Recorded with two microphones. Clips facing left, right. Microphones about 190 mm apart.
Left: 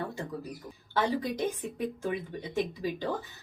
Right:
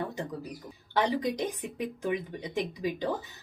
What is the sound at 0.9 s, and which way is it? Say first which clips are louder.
Speech: right 1 dB; 15° right (ahead or behind).